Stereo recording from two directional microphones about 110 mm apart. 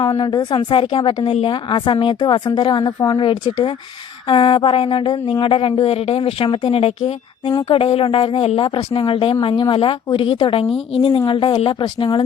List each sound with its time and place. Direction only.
0.0 s speech: 45° left (ahead or behind)